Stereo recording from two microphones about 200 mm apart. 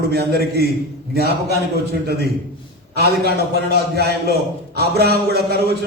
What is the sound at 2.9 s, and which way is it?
A man's voice, 55° right (ahead or behind).